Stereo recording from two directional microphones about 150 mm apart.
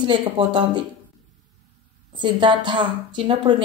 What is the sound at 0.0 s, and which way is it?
Speech, 30° right (ahead or behind).